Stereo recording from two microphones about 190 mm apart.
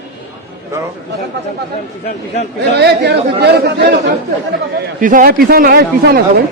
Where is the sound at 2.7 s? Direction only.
60° right (ahead or behind).